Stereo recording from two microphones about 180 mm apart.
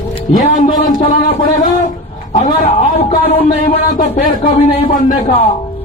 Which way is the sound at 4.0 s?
45° left (ahead or behind).